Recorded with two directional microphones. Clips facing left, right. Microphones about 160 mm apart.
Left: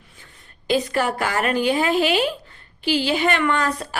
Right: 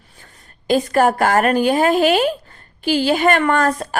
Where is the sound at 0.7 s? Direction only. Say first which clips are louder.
Right 6 dB; 45° right (ahead or behind).